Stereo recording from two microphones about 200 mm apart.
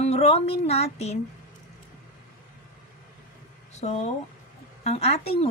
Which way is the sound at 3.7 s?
35° left (ahead or behind).